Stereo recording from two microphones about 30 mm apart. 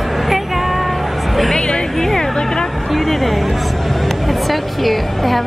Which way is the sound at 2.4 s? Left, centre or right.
Centre.